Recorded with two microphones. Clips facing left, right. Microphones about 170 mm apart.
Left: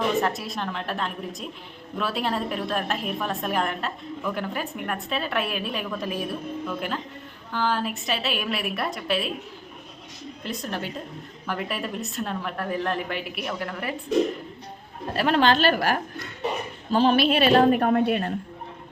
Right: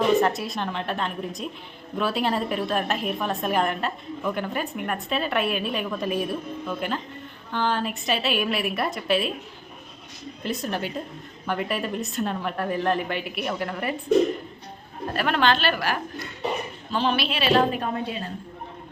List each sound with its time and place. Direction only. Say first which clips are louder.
0.2 s a woman's voice: right 2 dB; centre (ahead or behind)
10.4 s a woman's voice: right 3 dB; centre (ahead or behind)
15.1 s a woman's voice: left 2 dB; 30° left (ahead or behind); by 18.3 s 60° left (ahead or behind)